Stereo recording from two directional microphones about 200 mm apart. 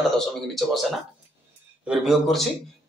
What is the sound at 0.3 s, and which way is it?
Speech, centre (ahead or behind).